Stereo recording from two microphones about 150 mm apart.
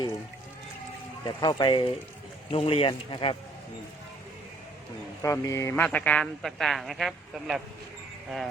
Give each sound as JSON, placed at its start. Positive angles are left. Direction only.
{"t": 1.2, "sound": "speech", "side_deg": 30}
{"t": 5.2, "sound": "speech", "side_deg": 20}